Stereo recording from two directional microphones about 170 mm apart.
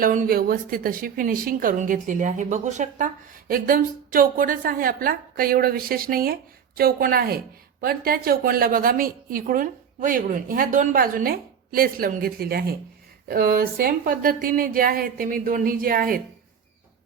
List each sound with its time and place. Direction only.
0.0 s a woman's voice: 55° right (ahead or behind)
3.5 s a woman's voice: 60° right (ahead or behind)